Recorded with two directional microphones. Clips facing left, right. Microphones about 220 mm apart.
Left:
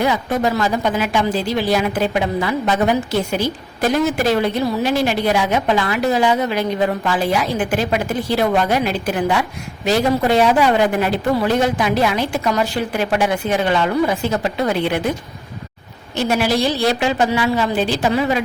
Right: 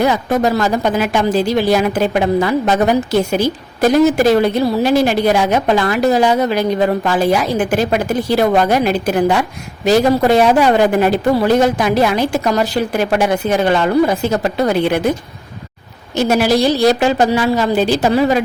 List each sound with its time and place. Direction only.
0.0 s a woman's voice: 45° right (ahead or behind)
16.1 s a woman's voice: 40° right (ahead or behind)